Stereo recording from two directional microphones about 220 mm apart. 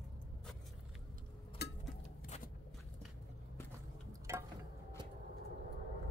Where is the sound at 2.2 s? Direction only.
35° left (ahead or behind).